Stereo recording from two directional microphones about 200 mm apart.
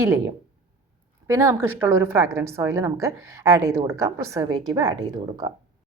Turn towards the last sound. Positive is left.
turn(degrees=-20)  # may be behind; listen again after turning